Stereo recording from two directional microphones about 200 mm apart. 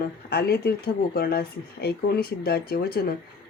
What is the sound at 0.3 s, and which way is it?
A woman's voice, 50° left (ahead or behind).